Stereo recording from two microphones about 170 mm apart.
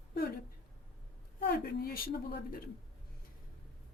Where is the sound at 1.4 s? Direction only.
60° left (ahead or behind).